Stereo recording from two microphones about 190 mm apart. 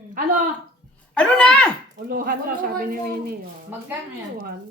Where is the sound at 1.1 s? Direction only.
5° left (ahead or behind).